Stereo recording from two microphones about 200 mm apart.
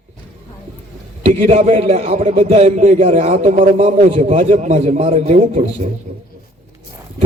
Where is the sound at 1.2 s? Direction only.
35° right (ahead or behind).